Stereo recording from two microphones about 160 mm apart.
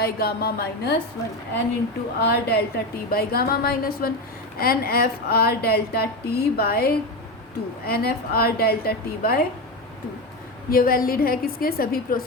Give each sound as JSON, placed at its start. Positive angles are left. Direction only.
{"t": 0.0, "sound": "a woman's voice", "side_deg": 70}
{"t": 2.2, "sound": "a woman's voice", "side_deg": 80}
{"t": 10.7, "sound": "a woman's voice", "side_deg": 65}